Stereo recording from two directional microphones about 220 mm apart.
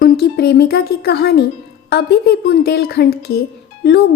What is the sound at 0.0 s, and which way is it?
A woman's voice, 45° left (ahead or behind).